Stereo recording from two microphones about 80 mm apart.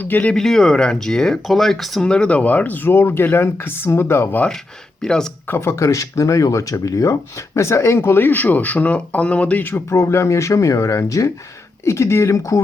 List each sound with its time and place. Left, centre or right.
0.0 s speech: centre
0.3 s speech: centre; by 4.4 s left
5.0 s speech: centre
5.5 s speech: left